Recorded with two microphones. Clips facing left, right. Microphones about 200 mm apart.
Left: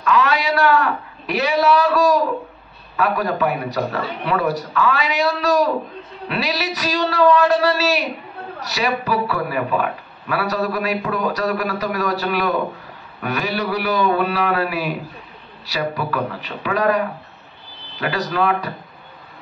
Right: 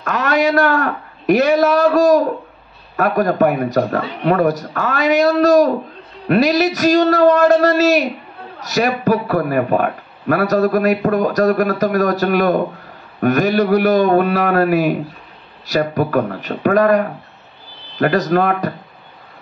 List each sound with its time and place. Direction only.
0.0 s a man's voice: 50° right (ahead or behind)